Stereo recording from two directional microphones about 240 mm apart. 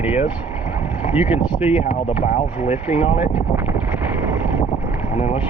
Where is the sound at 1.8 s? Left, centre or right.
Left.